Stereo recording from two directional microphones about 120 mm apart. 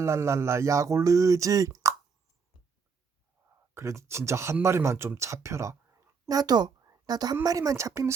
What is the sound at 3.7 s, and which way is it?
A woman's voice, 25° right (ahead or behind).